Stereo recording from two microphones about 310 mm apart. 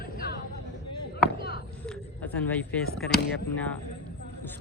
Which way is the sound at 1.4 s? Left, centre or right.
Left.